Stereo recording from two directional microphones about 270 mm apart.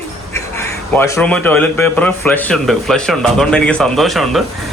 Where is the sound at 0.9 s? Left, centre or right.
Centre.